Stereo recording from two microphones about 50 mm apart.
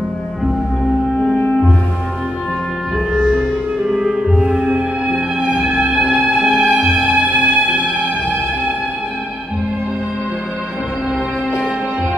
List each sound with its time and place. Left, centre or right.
3.2 s music: centre
6.5 s music: centre
7.1 s music: right